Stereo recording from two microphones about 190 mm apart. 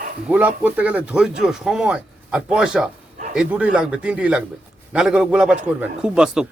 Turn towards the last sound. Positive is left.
turn(degrees=-5)  # may be behind; listen again after turning